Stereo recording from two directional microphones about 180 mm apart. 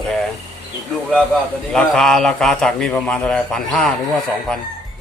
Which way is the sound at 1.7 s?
5° left (ahead or behind).